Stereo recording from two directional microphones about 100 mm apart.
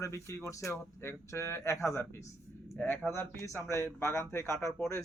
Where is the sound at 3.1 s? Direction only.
20° left (ahead or behind).